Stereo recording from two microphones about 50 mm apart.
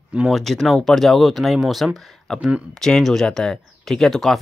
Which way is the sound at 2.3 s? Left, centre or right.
Centre.